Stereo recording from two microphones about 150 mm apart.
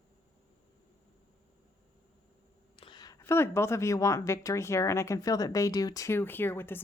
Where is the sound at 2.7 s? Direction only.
30° left (ahead or behind).